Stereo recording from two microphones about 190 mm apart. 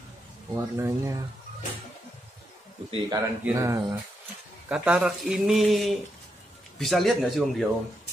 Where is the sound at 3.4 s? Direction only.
15° right (ahead or behind); by 7.6 s centre (ahead or behind).